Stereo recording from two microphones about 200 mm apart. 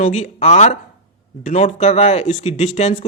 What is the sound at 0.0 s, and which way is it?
Speech, 35° left (ahead or behind).